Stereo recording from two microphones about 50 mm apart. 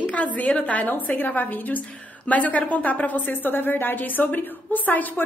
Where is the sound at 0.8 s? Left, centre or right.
Left.